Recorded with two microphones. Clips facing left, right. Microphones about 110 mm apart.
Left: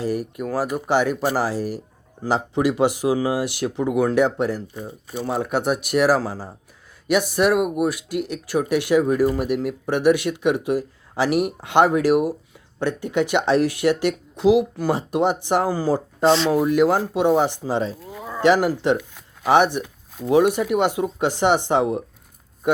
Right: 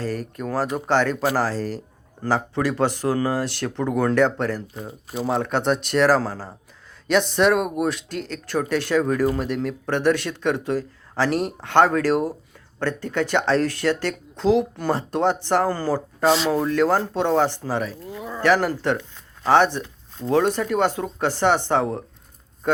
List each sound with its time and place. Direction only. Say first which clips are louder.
0.0 s speech: left 3 dB; 15° left (ahead or behind)
16.2 s speech: left 2 dB; 5° right (ahead or behind)
16.5 s speech: left 2 dB; 15° left (ahead or behind)
22.6 s a sound: left 1 dB; 15° left (ahead or behind)